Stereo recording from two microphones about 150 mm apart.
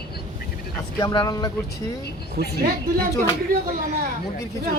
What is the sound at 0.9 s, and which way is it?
Speech, 25° left (ahead or behind).